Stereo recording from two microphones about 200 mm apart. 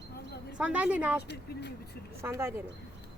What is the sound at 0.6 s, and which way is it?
Speech, 5° right (ahead or behind).